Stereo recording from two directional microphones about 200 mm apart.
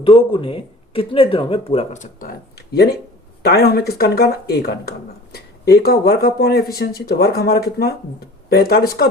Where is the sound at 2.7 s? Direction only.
50° left (ahead or behind).